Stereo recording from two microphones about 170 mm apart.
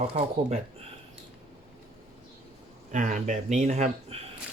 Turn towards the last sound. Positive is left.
turn(degrees=-40)  # may be behind; listen again after turning